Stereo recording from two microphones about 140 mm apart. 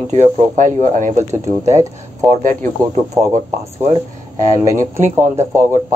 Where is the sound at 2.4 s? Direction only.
70° right (ahead or behind).